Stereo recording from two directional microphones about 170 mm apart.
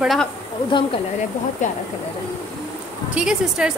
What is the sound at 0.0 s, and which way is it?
Speech, centre (ahead or behind).